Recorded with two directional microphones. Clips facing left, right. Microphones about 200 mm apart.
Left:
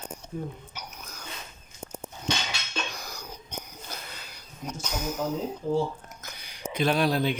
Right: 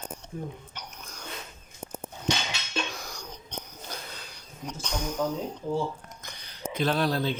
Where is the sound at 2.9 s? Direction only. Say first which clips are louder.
Even; centre (ahead or behind).